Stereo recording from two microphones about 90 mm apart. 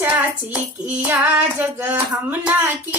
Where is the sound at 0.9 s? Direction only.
20° right (ahead or behind).